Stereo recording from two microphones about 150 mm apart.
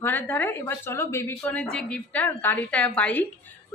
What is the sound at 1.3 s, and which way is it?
A woman's voice, 5° left (ahead or behind).